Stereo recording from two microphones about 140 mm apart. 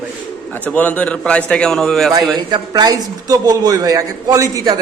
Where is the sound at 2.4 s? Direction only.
30° right (ahead or behind).